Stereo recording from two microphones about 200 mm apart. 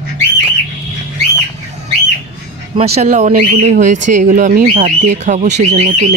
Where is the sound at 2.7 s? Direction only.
30° right (ahead or behind).